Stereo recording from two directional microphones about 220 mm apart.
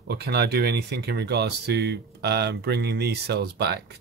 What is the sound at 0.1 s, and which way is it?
Speech, 45° right (ahead or behind).